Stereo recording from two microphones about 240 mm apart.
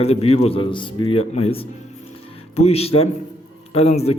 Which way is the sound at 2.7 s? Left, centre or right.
Left.